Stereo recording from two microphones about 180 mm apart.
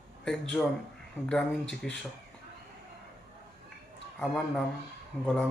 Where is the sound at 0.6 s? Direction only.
10° left (ahead or behind).